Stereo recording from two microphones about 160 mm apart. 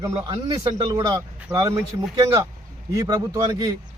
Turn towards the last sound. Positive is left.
turn(degrees=-25)  # may be behind; listen again after turning